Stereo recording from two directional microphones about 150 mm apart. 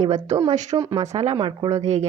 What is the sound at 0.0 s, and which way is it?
Speech, 50° right (ahead or behind).